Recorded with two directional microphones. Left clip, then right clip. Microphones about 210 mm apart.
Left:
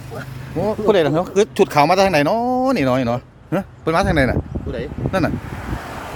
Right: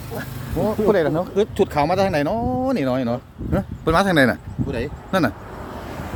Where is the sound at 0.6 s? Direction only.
30° left (ahead or behind).